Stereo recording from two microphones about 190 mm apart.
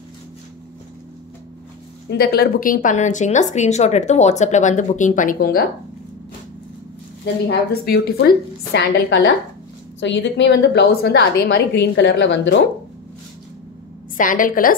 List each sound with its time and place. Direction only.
2.0 s speech: 55° left (ahead or behind)
7.4 s a woman's voice: 55° left (ahead or behind); by 12.6 s 70° left (ahead or behind)
14.1 s a woman's voice: 45° left (ahead or behind)